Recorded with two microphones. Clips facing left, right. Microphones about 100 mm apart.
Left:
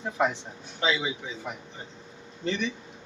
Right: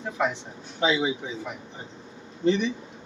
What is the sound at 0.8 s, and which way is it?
Speech, 15° right (ahead or behind).